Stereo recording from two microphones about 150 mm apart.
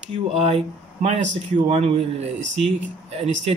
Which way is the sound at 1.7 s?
45° right (ahead or behind).